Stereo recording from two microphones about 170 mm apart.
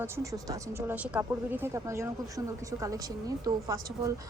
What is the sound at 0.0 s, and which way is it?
Speech, 20° right (ahead or behind).